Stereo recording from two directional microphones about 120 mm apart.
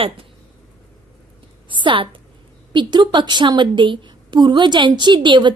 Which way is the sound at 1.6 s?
40° right (ahead or behind).